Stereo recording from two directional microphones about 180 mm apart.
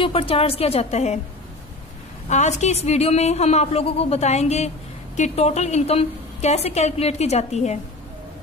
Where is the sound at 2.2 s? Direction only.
40° left (ahead or behind).